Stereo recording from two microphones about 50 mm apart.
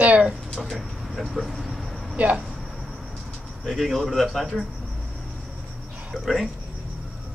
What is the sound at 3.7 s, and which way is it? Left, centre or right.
Speech, centre.